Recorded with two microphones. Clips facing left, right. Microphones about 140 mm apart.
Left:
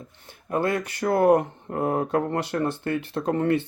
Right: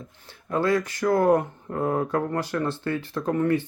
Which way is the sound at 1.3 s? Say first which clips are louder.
Left 2 dB; 30° left (ahead or behind).